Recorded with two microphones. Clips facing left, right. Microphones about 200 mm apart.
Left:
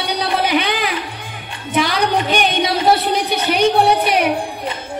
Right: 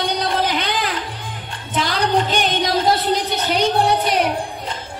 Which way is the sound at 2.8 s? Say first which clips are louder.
Left 2 dB; 65° left (ahead or behind).